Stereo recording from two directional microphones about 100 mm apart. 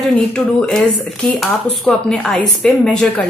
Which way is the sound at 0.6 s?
5° left (ahead or behind).